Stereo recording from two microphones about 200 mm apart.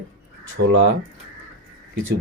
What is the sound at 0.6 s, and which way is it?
Speech, 70° right (ahead or behind).